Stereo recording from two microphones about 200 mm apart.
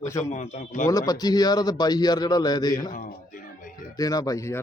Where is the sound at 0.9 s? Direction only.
20° left (ahead or behind).